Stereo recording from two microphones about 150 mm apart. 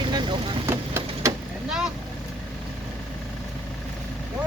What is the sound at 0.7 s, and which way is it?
Vehicle, 15° right (ahead or behind).